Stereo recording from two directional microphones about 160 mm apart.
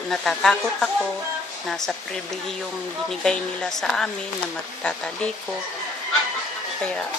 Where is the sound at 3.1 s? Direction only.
5° left (ahead or behind).